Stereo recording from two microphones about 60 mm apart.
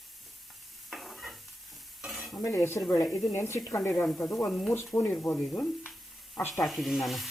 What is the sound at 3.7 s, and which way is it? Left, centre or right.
Speech, left.